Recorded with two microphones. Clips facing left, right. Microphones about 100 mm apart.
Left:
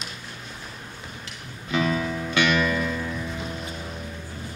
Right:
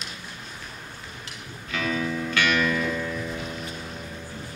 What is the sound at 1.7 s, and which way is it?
Music, 20° left (ahead or behind).